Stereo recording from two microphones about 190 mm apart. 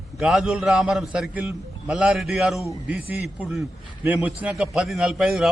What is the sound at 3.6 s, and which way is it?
Speech, 15° right (ahead or behind).